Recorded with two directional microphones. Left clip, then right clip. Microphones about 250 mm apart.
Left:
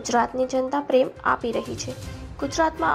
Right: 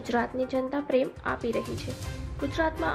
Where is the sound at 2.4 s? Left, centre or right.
Centre.